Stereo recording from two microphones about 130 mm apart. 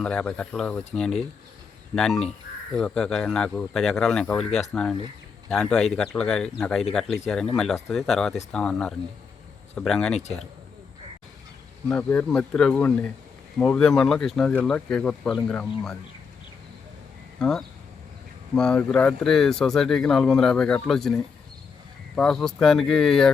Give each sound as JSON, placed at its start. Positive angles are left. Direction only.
{"t": 0.0, "sound": "speech", "side_deg": 10}
{"t": 11.9, "sound": "speech", "side_deg": 10}
{"t": 17.4, "sound": "speech", "side_deg": 5}